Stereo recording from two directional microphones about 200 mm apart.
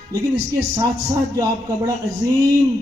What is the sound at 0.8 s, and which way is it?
Speech, 15° right (ahead or behind).